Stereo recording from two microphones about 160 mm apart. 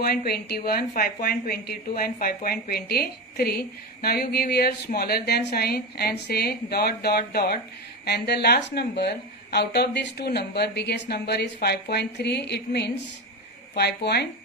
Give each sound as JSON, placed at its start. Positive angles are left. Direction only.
{"t": 0.0, "sound": "a woman's voice", "side_deg": 75}
{"t": 8.0, "sound": "a woman's voice", "side_deg": 90}